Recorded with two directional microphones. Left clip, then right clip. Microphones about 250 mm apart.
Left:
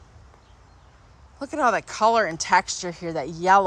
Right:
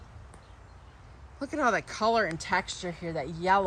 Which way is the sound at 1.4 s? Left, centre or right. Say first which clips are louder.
Left 5 dB; centre.